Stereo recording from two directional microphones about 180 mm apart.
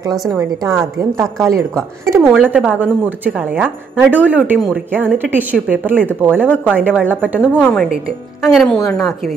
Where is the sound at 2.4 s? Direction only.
10° right (ahead or behind).